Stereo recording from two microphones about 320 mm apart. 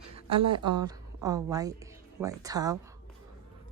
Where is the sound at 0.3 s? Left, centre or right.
Centre.